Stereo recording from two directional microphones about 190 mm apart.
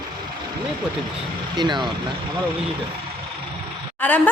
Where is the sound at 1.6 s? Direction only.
25° right (ahead or behind).